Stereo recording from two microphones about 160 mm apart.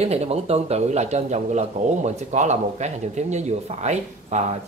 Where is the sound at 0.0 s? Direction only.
40° right (ahead or behind).